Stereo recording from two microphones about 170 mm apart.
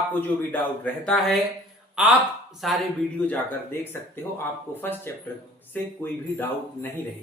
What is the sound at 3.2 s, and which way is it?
Speech, 10° left (ahead or behind).